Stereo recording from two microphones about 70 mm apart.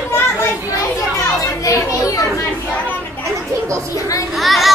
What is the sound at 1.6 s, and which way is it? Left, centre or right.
Children playing, left.